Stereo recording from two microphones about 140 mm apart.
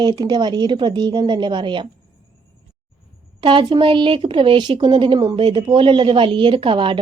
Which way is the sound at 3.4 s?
35° right (ahead or behind).